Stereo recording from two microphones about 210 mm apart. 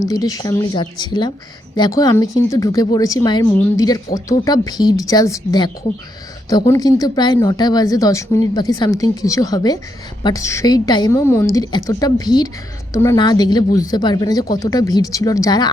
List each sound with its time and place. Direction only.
0.1 s a woman's voice: 15° left (ahead or behind)